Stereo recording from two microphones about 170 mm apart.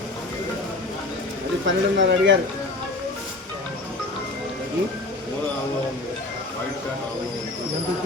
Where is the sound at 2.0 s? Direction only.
90° right.